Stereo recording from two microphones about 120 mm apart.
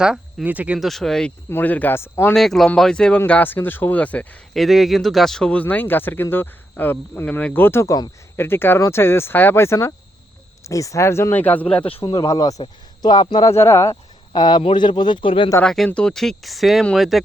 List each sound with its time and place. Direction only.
0.0 s speech: 5° right (ahead or behind)
0.8 s speech: centre (ahead or behind)
1.5 s speech: 15° left (ahead or behind)
2.3 s speech: 5° left (ahead or behind)
4.5 s speech: centre (ahead or behind); by 8.1 s 30° left (ahead or behind)
8.4 s speech: 20° left (ahead or behind)
11.9 s speech: 50° left (ahead or behind)
12.1 s a man's voice: 30° left (ahead or behind)
13.5 s speech: 20° left (ahead or behind)
13.9 s a sound: 35° left (ahead or behind)
14.6 s speech: 40° left (ahead or behind)
15.6 s speech: centre (ahead or behind)